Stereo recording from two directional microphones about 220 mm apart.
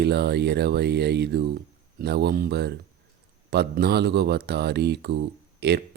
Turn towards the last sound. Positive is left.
turn(degrees=-50)  # may be behind; listen again after turning